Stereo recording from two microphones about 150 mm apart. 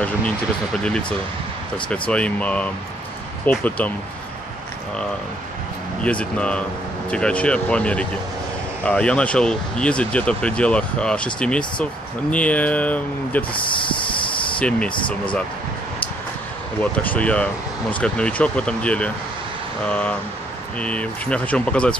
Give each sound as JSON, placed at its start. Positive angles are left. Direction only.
{"t": 1.9, "sound": "speech", "side_deg": 10}
{"t": 6.0, "sound": "speech", "side_deg": 10}
{"t": 13.5, "sound": "a sound", "side_deg": 35}
{"t": 14.6, "sound": "speech", "side_deg": 10}
{"t": 16.9, "sound": "speech", "side_deg": 10}